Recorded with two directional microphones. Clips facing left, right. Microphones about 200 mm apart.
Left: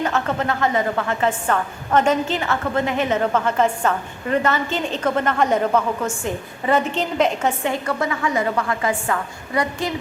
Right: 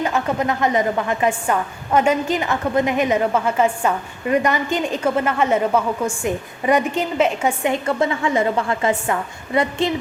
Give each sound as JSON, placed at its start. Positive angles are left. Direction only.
{"t": 0.0, "sound": "a woman's voice", "side_deg": -10}
{"t": 7.7, "sound": "a woman's voice", "side_deg": -25}